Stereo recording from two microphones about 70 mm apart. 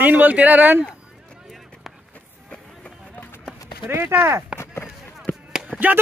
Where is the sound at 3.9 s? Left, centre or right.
Right.